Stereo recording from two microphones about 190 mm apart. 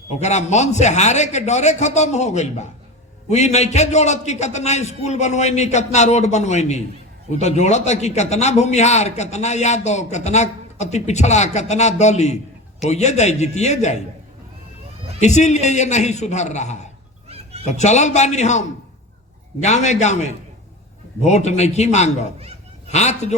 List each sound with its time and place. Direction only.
0.2 s a man's voice: 35° left (ahead or behind)
15.2 s a man's voice: 35° left (ahead or behind)
17.2 s a sound: 30° right (ahead or behind)
17.7 s a man's voice: 35° left (ahead or behind)
19.6 s a man's voice: 35° left (ahead or behind)
21.2 s a man's voice: 35° left (ahead or behind)